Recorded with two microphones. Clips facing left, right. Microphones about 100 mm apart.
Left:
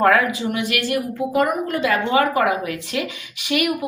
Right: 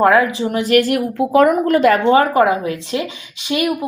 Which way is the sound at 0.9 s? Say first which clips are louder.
Right 6 dB; 90° right.